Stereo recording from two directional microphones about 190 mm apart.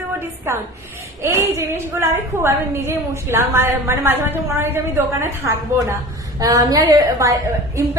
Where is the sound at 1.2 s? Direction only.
15° right (ahead or behind).